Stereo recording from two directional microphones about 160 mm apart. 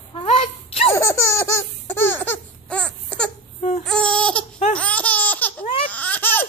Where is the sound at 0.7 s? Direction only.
35° left (ahead or behind).